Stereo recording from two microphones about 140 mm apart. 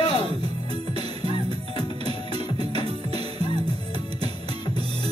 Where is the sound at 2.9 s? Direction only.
45° right (ahead or behind).